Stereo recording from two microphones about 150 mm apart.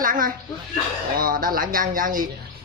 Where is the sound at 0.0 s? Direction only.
65° right (ahead or behind).